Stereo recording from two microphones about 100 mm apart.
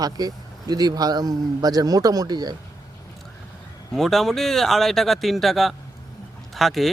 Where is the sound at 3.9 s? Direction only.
5° left (ahead or behind).